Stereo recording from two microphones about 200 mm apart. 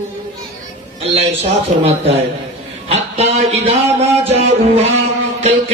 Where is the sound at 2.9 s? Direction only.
30° right (ahead or behind).